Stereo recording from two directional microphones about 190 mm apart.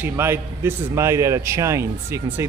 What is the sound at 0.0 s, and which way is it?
A man's voice, 15° right (ahead or behind).